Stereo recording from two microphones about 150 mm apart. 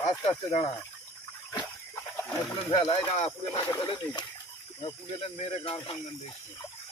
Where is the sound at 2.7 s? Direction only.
40° left (ahead or behind).